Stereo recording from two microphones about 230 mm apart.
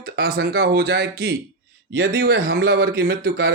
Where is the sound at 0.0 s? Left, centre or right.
Right.